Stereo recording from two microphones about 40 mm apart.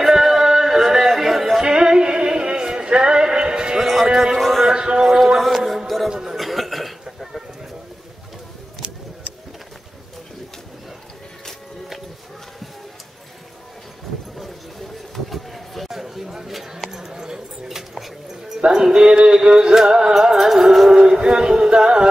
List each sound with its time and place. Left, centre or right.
0.0 s music: centre
1.6 s music: centre
3.8 s music: centre
4.1 s music: centre
4.4 s a sound: centre
4.6 s music: centre
5.1 s music: centre
6.3 s cough: centre
14.4 s a sound: centre
18.6 s music: centre